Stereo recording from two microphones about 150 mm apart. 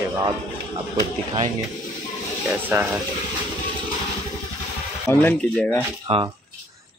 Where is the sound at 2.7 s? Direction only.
15° right (ahead or behind).